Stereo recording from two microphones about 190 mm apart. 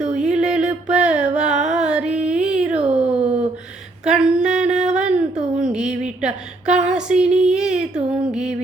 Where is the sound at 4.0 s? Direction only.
5° right (ahead or behind).